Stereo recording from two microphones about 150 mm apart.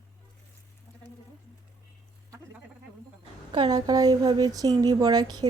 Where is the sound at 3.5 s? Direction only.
30° right (ahead or behind).